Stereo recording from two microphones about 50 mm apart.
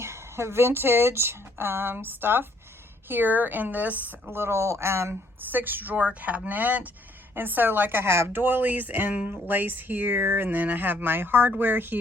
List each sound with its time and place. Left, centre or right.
0.0 s speech: right
4.3 s speech: right
5.5 s speech: right
9.5 s speech: right